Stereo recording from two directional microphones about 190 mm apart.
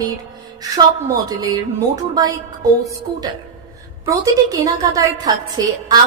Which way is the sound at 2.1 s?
20° right (ahead or behind).